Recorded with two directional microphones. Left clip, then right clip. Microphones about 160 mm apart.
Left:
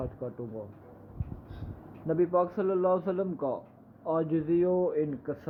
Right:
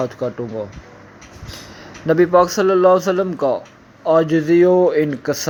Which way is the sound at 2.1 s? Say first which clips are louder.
Right 14 dB; 35° right (ahead or behind).